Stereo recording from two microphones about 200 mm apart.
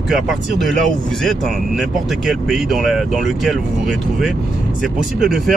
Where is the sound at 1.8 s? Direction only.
Centre (ahead or behind).